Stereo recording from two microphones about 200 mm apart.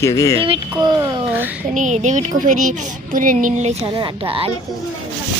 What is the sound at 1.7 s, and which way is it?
Speech, 40° right (ahead or behind).